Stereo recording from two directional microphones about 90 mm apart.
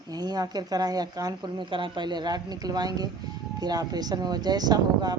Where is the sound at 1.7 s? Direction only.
60° right (ahead or behind).